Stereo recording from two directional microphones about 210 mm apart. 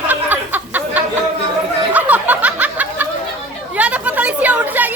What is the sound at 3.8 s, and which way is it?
Chatter, 5° right (ahead or behind).